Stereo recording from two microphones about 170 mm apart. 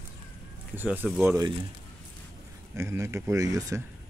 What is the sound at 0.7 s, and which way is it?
Speech, 10° right (ahead or behind).